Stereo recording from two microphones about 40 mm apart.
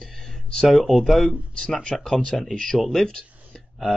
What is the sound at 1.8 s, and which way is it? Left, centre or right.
Speech, centre.